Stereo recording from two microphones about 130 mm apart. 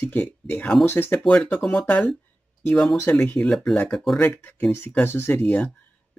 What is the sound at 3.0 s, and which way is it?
Speech, 15° left (ahead or behind).